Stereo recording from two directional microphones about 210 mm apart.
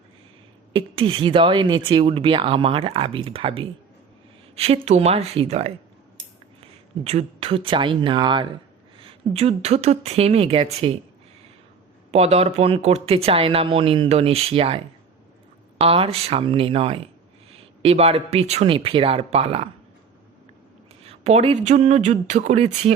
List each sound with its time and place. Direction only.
0.7 s speech: 25° right (ahead or behind)
12.1 s speech: 30° right (ahead or behind)
15.8 s speech: 25° right (ahead or behind)
21.0 s speech: 30° right (ahead or behind)